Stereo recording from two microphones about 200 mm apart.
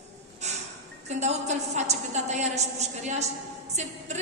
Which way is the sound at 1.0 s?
35° right (ahead or behind).